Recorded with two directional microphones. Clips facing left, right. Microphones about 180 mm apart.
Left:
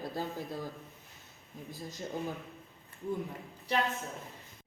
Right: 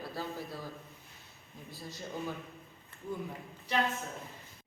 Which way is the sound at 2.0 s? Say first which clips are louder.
Left 2 dB; 20° left (ahead or behind).